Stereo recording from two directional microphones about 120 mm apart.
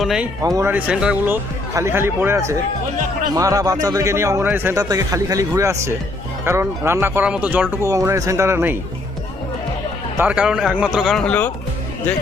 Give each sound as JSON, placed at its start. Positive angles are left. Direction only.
{"t": 0.0, "sound": "speech", "side_deg": -5}
{"t": 0.4, "sound": "a man's voice", "side_deg": -30}
{"t": 0.7, "sound": "speech", "side_deg": -10}
{"t": 1.7, "sound": "a man's voice", "side_deg": -20}
{"t": 4.8, "sound": "a man's voice", "side_deg": -30}
{"t": 7.9, "sound": "a man's voice", "side_deg": -25}
{"t": 10.2, "sound": "speech", "side_deg": -10}